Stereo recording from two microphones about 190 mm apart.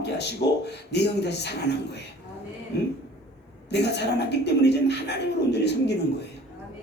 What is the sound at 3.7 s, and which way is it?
A man's voice, 65° left (ahead or behind).